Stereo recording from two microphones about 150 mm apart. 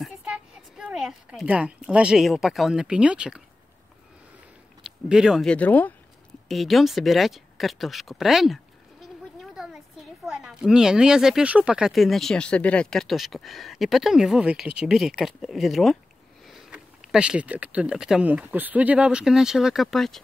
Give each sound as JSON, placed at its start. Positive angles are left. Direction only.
{"t": 0.7, "sound": "speech", "side_deg": -5}
{"t": 4.8, "sound": "speech", "side_deg": -5}
{"t": 5.5, "sound": "speech", "side_deg": 10}
{"t": 6.5, "sound": "speech", "side_deg": 0}
{"t": 9.4, "sound": "a sound", "side_deg": -5}
{"t": 10.2, "sound": "speech", "side_deg": -5}